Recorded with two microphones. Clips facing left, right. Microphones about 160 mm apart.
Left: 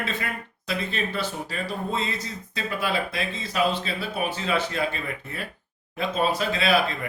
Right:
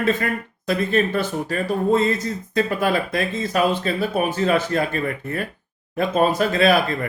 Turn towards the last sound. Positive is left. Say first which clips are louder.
# right 6 dB
turn(degrees=-50)  # may be behind; listen again after turning